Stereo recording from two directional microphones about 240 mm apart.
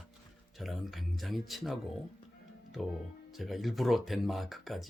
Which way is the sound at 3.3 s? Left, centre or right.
Centre.